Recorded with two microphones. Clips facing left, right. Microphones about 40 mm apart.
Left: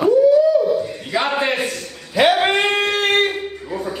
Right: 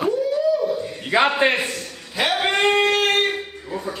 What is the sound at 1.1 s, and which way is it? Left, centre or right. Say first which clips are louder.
Speech: right 3 dB; right.